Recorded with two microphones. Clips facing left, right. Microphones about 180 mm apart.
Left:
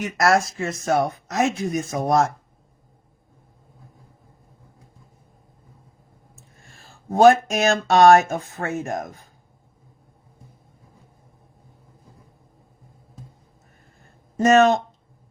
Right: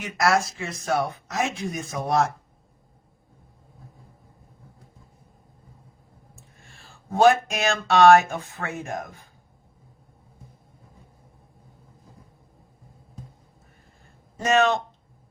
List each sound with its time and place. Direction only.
0.0 s speech: 45° left (ahead or behind)
6.7 s speech: 40° left (ahead or behind)
14.3 s speech: 45° left (ahead or behind)